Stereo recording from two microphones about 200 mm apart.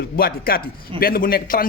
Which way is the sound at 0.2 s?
50° left (ahead or behind).